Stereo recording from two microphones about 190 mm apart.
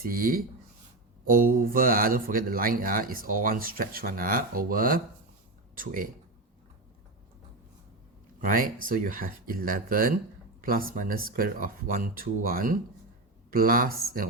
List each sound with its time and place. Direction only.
0.0 s speech: 50° right (ahead or behind)
8.4 s speech: 45° right (ahead or behind)